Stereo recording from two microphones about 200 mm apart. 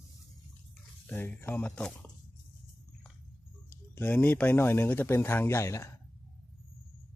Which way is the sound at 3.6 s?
10° left (ahead or behind).